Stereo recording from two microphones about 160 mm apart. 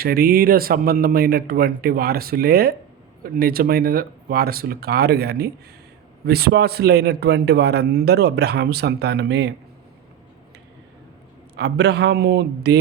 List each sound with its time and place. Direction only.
0.0 s a man's voice: 70° right (ahead or behind); by 9.5 s 90° right
11.5 s a man's voice: 90° right